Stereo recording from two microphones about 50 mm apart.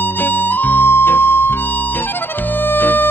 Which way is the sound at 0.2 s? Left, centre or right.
Left.